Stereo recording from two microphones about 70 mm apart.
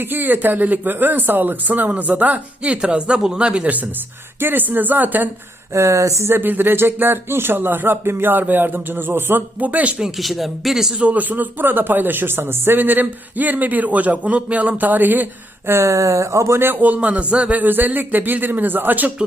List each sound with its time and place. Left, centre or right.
0.0 s speech: right
5.7 s speech: right
6.2 s speech: right
10.2 s speech: centre
11.0 s speech: right
15.7 s a man's voice: right